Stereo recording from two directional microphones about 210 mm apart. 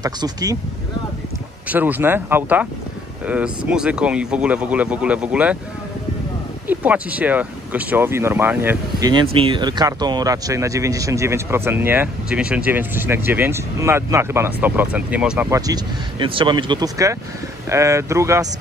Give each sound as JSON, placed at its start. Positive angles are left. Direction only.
{"t": 0.0, "sound": "speech", "side_deg": -20}
{"t": 1.7, "sound": "speech", "side_deg": -10}
{"t": 6.7, "sound": "speech", "side_deg": -5}